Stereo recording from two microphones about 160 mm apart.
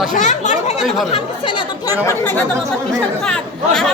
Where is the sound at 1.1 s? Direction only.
30° left (ahead or behind).